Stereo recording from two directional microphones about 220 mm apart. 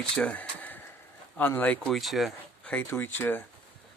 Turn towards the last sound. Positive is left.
turn(degrees=10)  # may be behind; listen again after turning